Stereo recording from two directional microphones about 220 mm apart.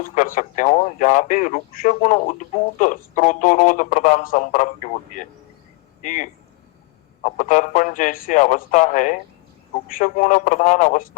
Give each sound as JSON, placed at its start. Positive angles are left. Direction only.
{"t": 0.0, "sound": "speech", "side_deg": 35}